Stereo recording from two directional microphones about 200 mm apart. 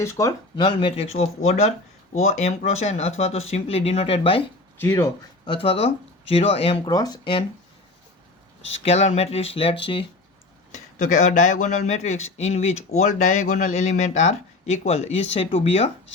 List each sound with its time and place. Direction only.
0.0 s speech: 15° left (ahead or behind)
4.8 s speech: 15° left (ahead or behind)
5.5 s speech: 30° left (ahead or behind)
8.8 s speech: 30° left (ahead or behind)
10.7 s speech: 40° left (ahead or behind)